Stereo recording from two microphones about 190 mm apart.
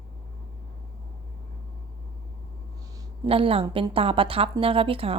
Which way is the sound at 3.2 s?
30° right (ahead or behind).